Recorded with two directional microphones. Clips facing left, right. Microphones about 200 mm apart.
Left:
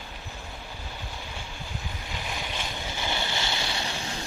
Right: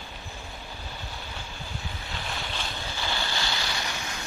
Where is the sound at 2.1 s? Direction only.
15° left (ahead or behind); by 4.3 s 30° left (ahead or behind).